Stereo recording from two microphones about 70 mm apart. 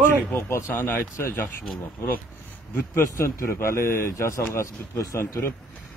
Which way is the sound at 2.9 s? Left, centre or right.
Left.